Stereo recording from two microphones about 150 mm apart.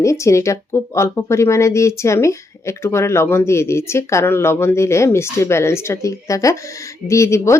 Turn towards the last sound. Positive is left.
turn(degrees=20)  # may be behind; listen again after turning